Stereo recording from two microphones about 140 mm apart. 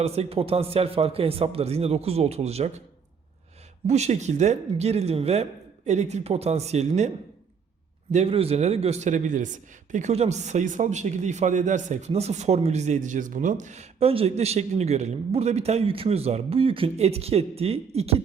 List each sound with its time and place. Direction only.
0.0 s a man's voice: 45° right (ahead or behind)
3.8 s a man's voice: 50° right (ahead or behind)
8.1 s a man's voice: 45° right (ahead or behind)